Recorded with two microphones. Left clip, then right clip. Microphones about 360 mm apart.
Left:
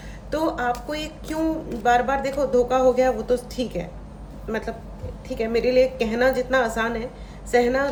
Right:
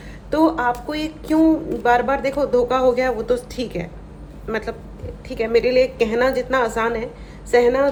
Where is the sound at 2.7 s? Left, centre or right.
Centre.